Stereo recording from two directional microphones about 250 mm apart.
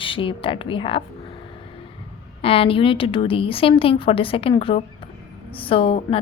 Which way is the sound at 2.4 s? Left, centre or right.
Left.